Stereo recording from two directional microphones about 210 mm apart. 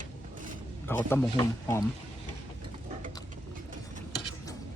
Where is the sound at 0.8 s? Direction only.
10° left (ahead or behind).